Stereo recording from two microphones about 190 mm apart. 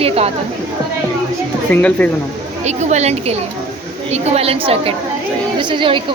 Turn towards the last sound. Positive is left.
turn(degrees=-25)  # may be behind; listen again after turning